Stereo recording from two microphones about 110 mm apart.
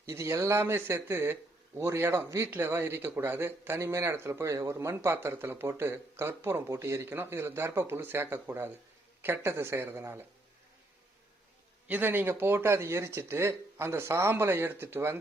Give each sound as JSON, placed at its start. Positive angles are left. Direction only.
{"t": 0.0, "sound": "speech", "side_deg": -25}
{"t": 11.9, "sound": "speech", "side_deg": -15}